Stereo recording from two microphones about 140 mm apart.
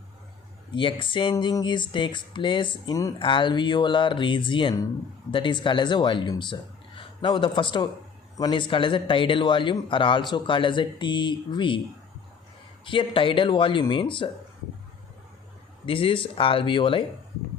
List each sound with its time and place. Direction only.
0.7 s speech: 35° left (ahead or behind)
12.8 s speech: 35° left (ahead or behind)
15.9 s speech: 40° left (ahead or behind)